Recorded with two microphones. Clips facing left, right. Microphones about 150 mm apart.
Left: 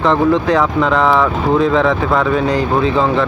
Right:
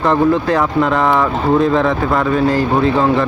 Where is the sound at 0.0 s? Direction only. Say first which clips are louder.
Even; 5° right (ahead or behind).